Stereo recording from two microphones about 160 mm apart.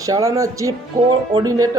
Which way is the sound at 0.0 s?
20° right (ahead or behind).